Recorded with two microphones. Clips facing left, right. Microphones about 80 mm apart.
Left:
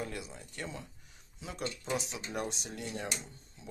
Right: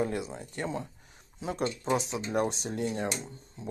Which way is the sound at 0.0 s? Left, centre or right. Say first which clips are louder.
Right 9 dB; right.